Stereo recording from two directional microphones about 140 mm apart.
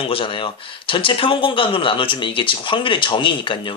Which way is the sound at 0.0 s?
40° left (ahead or behind).